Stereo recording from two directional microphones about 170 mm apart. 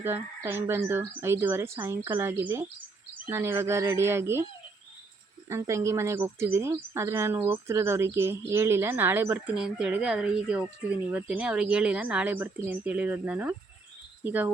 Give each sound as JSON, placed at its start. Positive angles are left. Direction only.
{"t": 0.0, "sound": "speech", "side_deg": -10}
{"t": 5.5, "sound": "speech", "side_deg": -15}